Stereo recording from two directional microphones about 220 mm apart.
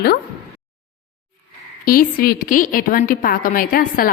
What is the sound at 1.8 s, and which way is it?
A woman's voice, 40° left (ahead or behind).